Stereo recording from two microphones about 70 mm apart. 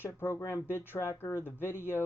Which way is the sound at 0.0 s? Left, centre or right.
Left.